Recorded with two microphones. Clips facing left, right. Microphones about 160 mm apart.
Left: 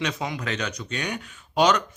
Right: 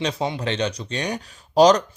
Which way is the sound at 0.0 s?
30° right (ahead or behind).